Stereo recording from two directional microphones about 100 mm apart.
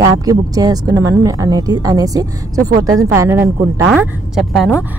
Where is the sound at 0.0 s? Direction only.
35° right (ahead or behind).